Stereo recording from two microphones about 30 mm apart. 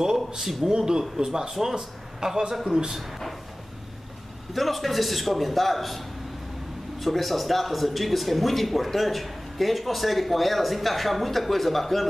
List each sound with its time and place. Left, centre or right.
0.4 s speech: centre
0.7 s a man's voice: right
2.5 s speech: centre
4.6 s speech: centre